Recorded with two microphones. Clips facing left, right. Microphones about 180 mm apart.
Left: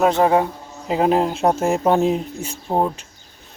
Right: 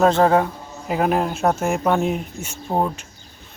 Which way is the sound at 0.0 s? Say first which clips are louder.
Even; 15° left (ahead or behind).